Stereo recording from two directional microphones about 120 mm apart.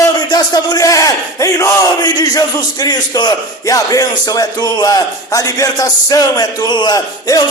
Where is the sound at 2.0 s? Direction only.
35° left (ahead or behind).